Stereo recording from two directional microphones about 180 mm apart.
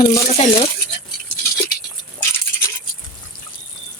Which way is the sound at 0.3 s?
35° left (ahead or behind).